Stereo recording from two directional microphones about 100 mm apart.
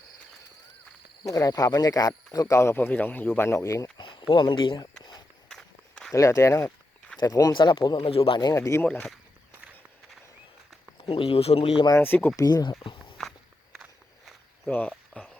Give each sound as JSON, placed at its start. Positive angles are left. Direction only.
{"t": 1.3, "sound": "speech", "side_deg": 35}
{"t": 3.9, "sound": "speech", "side_deg": 50}
{"t": 5.5, "sound": "walk", "side_deg": 5}
{"t": 6.1, "sound": "speech", "side_deg": 30}
{"t": 7.5, "sound": "speech", "side_deg": 55}
{"t": 8.1, "sound": "speech", "side_deg": 75}
{"t": 8.5, "sound": "speech", "side_deg": 30}
{"t": 8.8, "sound": "speech", "side_deg": 10}
{"t": 11.0, "sound": "speech", "side_deg": 75}
{"t": 11.9, "sound": "speech", "side_deg": 20}
{"t": 12.4, "sound": "speech", "side_deg": 40}
{"t": 12.8, "sound": "walk", "side_deg": 55}
{"t": 14.7, "sound": "a sound", "side_deg": 15}